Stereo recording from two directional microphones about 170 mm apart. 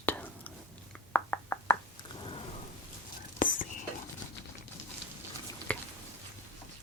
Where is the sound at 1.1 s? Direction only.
10° left (ahead or behind).